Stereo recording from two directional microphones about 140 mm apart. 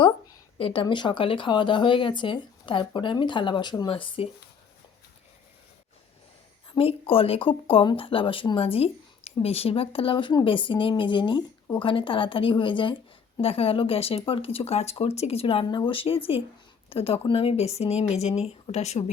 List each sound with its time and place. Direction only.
0.0 s speech: 35° left (ahead or behind)
6.7 s speech: 40° left (ahead or behind)